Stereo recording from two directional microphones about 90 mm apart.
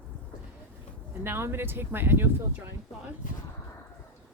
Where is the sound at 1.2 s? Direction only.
25° right (ahead or behind).